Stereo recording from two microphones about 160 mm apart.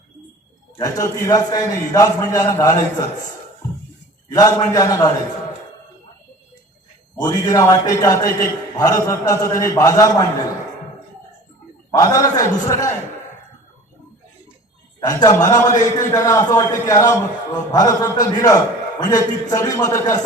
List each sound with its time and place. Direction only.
0.8 s a man's voice: 20° left (ahead or behind)
4.4 s a man's voice: 20° left (ahead or behind)
7.2 s a man's voice: 25° left (ahead or behind)
11.9 s a man's voice: 20° left (ahead or behind)
15.0 s a man's voice: 20° left (ahead or behind)